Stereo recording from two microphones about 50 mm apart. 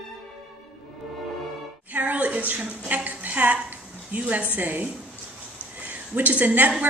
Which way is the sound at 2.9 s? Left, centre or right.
Right.